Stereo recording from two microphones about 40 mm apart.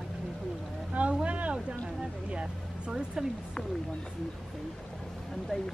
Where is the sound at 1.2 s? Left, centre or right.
Right.